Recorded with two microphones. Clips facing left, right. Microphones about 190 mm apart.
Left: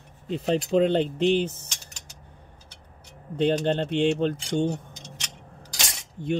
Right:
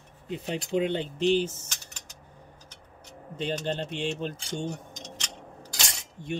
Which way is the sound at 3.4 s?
60° left (ahead or behind).